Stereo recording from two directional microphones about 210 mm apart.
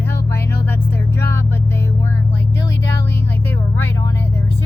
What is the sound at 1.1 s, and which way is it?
Vehicle, 10° left (ahead or behind).